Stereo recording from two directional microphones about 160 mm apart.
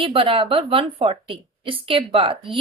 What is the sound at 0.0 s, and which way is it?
A woman's voice, 35° right (ahead or behind).